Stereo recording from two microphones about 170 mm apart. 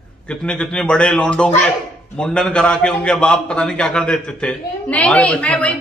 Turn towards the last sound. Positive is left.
turn(degrees=5)  # may be behind; listen again after turning